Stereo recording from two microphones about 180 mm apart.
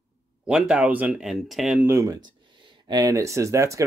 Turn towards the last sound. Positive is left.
turn(degrees=-15)  # may be behind; listen again after turning